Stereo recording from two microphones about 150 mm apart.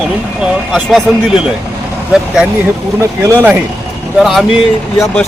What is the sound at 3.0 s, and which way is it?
Speech, 15° right (ahead or behind).